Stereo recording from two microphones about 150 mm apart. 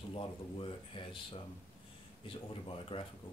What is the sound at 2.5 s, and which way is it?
Speech, 35° left (ahead or behind).